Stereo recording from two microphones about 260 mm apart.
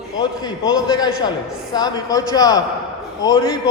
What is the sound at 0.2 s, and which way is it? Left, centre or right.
A man's voice, centre.